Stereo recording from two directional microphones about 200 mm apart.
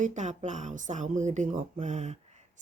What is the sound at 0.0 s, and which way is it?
Speech, 35° right (ahead or behind).